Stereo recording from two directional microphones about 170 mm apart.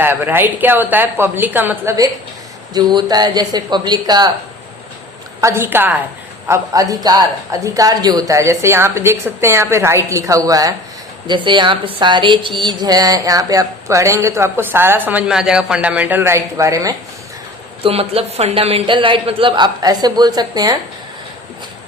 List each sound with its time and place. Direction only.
0.0 s speech: 10° right (ahead or behind)
5.4 s speech: 15° right (ahead or behind)
17.8 s speech: 35° right (ahead or behind)